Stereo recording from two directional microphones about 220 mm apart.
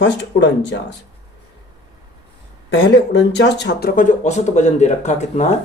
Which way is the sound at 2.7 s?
50° left (ahead or behind).